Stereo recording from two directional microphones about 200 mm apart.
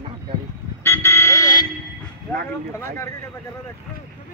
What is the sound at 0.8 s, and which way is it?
Vehicle, 10° left (ahead or behind).